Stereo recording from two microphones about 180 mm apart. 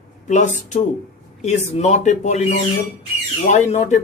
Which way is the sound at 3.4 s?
40° left (ahead or behind).